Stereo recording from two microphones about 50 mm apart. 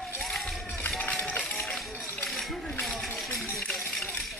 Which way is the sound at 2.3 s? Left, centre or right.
Centre.